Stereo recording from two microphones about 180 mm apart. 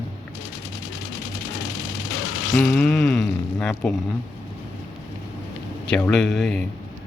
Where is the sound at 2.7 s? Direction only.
Centre (ahead or behind).